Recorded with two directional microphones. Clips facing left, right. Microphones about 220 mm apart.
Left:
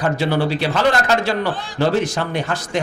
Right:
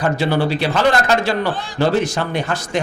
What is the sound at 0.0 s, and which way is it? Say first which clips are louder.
Speech: right 1 dB; 25° right (ahead or behind).